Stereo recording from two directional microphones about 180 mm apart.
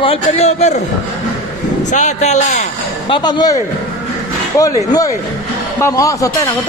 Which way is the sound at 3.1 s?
25° left (ahead or behind).